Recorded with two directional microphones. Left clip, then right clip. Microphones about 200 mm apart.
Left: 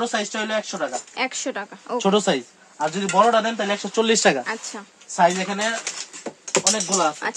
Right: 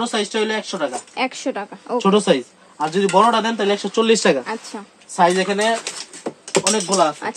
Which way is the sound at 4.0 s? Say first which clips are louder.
Right 2 dB; 40° left (ahead or behind).